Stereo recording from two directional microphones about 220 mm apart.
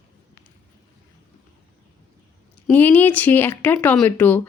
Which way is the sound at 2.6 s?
5° left (ahead or behind).